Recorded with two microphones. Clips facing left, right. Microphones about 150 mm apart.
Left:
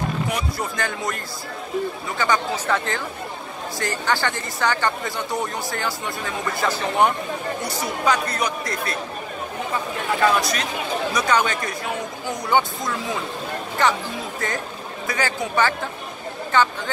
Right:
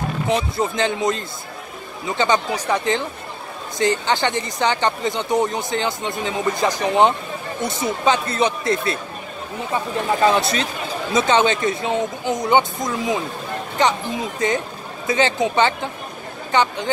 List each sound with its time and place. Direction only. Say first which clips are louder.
0.3 s speech: right 6 dB; 20° right (ahead or behind)
10.2 s speech: right 2 dB; 25° right (ahead or behind)